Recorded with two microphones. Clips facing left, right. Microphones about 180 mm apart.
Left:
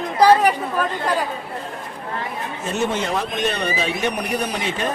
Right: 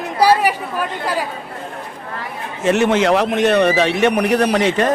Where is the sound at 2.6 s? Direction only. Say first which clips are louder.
Right 9 dB; 85° right.